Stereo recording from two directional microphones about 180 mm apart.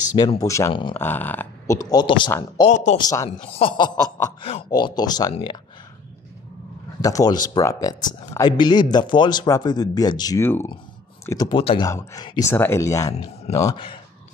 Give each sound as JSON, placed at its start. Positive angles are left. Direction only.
{"t": 0.4, "sound": "speech", "side_deg": 15}
{"t": 2.7, "sound": "a man's voice", "side_deg": 40}
{"t": 3.0, "sound": "speech", "side_deg": 20}
{"t": 3.3, "sound": "speech", "side_deg": 30}
{"t": 7.0, "sound": "speech", "side_deg": 20}
{"t": 11.9, "sound": "speech", "side_deg": 15}